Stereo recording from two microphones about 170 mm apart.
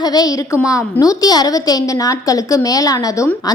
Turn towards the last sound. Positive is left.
turn(degrees=20)  # may be behind; listen again after turning